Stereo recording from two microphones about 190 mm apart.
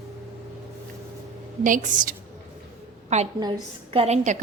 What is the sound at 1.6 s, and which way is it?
A woman's voice, 45° right (ahead or behind).